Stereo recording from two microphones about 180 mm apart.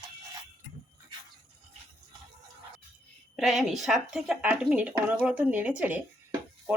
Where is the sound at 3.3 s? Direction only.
Centre (ahead or behind).